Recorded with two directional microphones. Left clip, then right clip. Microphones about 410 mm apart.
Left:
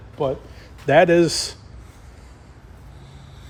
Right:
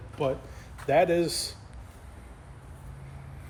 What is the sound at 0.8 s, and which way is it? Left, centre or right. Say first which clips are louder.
Speech: left 9 dB; left.